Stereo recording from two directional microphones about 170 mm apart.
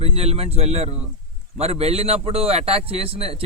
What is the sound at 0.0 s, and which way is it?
A man's voice, 35° right (ahead or behind).